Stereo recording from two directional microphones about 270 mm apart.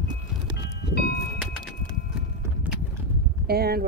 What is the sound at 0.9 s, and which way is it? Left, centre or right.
Music, left.